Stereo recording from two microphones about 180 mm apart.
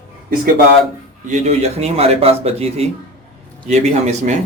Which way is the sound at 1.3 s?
35° right (ahead or behind).